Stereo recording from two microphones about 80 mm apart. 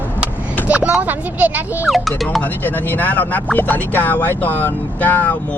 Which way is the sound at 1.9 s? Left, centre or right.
Centre.